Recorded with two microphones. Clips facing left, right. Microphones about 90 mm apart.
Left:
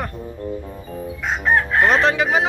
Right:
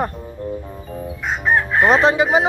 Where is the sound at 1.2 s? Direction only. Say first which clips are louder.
Even; 5° right (ahead or behind).